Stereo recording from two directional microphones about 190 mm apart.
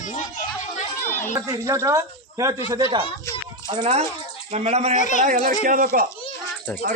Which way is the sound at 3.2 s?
15° left (ahead or behind).